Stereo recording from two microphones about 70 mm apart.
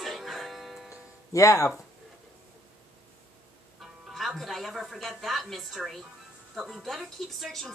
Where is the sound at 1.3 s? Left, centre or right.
Left.